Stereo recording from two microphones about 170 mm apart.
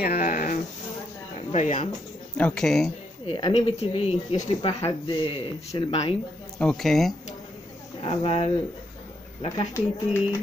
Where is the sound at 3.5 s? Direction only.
35° left (ahead or behind).